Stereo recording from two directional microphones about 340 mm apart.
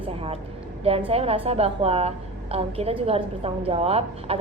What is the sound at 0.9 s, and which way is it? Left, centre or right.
A woman's voice, centre.